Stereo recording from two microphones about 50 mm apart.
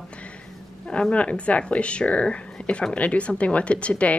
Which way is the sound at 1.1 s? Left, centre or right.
Left.